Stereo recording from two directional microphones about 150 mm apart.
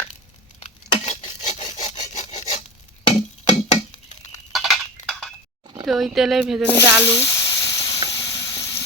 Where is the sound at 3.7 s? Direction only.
45° left (ahead or behind).